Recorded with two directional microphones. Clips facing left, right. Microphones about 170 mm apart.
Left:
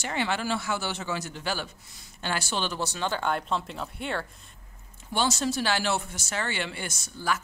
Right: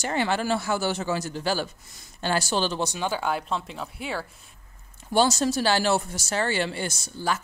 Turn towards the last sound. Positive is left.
turn(degrees=-30)  # may be behind; listen again after turning